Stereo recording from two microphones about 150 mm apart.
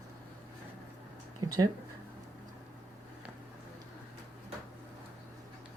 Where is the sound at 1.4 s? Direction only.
25° right (ahead or behind).